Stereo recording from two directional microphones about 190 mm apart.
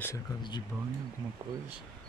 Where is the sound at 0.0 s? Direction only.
20° left (ahead or behind).